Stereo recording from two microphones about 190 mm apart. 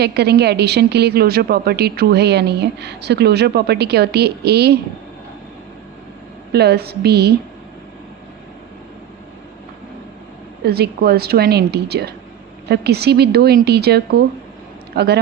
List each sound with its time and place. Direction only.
0.0 s a woman's voice: 60° right (ahead or behind)
6.5 s a woman's voice: 55° right (ahead or behind)
10.6 s a woman's voice: 55° right (ahead or behind)